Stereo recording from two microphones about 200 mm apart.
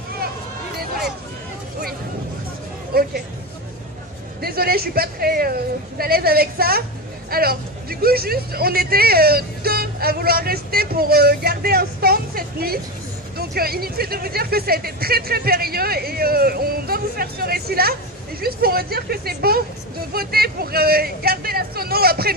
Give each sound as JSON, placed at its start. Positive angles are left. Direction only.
{"t": 2.9, "sound": "speech", "side_deg": -50}
{"t": 4.4, "sound": "speech", "side_deg": -50}